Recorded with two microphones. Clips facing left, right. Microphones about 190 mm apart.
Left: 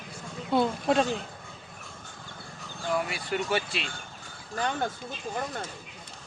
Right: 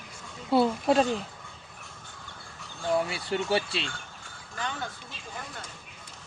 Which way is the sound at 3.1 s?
30° right (ahead or behind).